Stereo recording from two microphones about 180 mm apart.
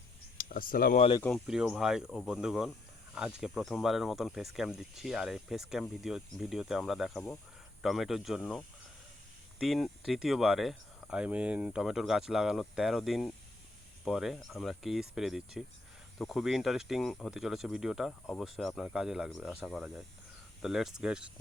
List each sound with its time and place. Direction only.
0.3 s speech: 50° left (ahead or behind)
1.2 s speech: centre (ahead or behind)